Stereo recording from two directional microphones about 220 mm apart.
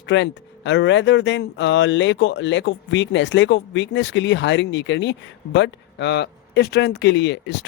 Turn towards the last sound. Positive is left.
turn(degrees=50)  # may be behind; listen again after turning